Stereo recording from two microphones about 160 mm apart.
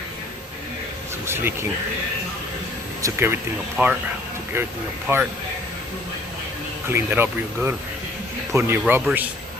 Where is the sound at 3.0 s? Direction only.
15° right (ahead or behind).